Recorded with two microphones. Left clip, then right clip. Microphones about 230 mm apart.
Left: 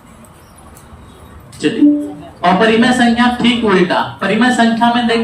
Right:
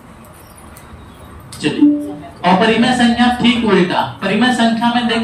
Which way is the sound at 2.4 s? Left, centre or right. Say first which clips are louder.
Left 2 dB; centre.